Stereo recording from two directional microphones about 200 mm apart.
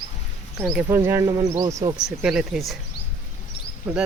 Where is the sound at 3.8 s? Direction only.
10° right (ahead or behind).